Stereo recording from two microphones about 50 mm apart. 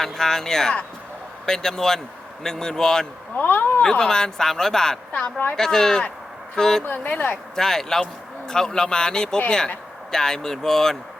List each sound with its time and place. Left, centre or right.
0.0 s speech: centre
3.3 s speech: left
3.8 s speech: centre
6.8 s speech: left
7.5 s speech: centre